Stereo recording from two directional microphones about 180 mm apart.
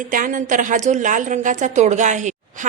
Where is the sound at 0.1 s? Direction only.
50° right (ahead or behind).